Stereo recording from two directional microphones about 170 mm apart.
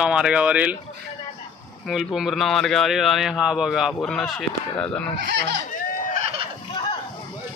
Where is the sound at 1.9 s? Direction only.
Centre (ahead or behind).